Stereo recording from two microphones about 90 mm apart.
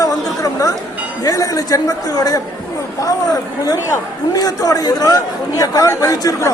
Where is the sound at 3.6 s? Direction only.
45° left (ahead or behind).